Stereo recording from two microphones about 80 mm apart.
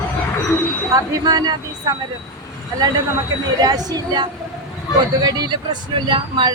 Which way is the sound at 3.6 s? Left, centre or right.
Right.